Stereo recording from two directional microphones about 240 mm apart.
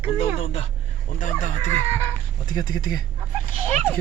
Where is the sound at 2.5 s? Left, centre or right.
Centre.